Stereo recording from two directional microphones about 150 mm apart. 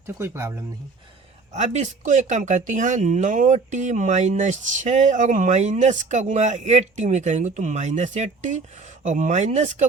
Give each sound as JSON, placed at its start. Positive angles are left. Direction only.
{"t": 0.2, "sound": "speech", "side_deg": -15}
{"t": 1.5, "sound": "speech", "side_deg": -50}